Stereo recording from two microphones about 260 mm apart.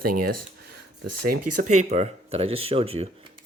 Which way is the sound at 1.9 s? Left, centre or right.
Right.